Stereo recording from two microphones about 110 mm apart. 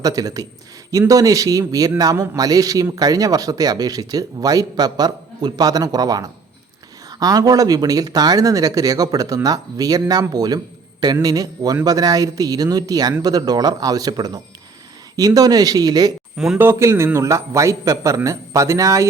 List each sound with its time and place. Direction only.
0.0 s speech: 30° right (ahead or behind)
16.6 s a man's voice: 25° right (ahead or behind)